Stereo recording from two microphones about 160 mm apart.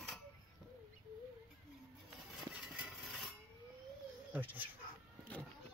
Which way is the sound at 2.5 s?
Centre (ahead or behind).